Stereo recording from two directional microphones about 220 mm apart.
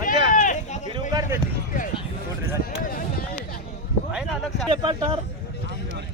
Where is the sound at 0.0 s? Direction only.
35° left (ahead or behind).